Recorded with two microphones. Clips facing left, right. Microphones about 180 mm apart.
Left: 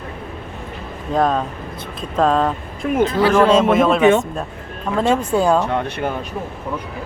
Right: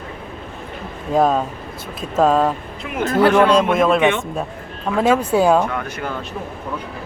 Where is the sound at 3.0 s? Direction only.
50° right (ahead or behind).